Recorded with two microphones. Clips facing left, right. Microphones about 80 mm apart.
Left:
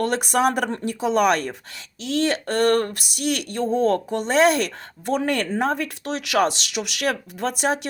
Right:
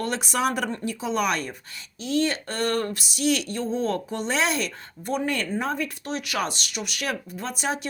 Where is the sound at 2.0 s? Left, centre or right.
Left.